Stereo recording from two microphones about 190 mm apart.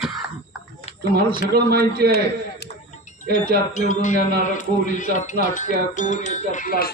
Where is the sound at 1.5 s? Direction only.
55° right (ahead or behind).